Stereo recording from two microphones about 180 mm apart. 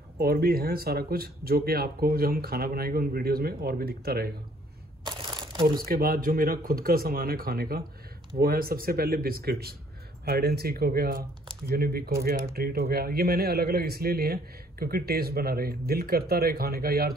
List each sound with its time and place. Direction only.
0.2 s a man's voice: 60° right (ahead or behind)
5.0 s crumpling: 25° right (ahead or behind)
5.9 s a man's voice: 55° right (ahead or behind)